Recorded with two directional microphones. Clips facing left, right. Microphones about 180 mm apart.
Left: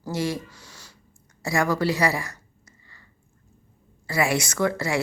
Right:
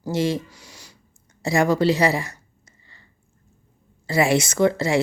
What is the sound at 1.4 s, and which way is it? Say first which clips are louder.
A woman's voice: right 4 dB; 25° right (ahead or behind).